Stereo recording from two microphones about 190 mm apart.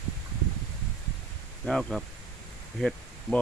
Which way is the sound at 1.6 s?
Centre (ahead or behind).